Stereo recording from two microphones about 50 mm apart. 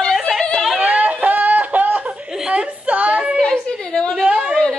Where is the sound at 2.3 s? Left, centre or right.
Centre.